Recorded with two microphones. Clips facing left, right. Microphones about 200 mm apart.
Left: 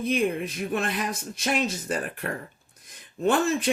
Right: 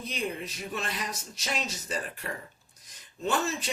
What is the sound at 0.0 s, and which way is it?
Speech, 55° left (ahead or behind).